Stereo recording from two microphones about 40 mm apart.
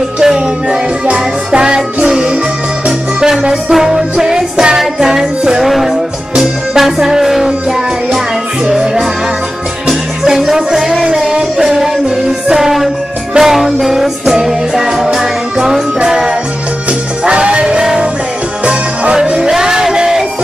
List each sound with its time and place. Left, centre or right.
0.2 s music: centre
8.6 s music: centre
19.5 s music: centre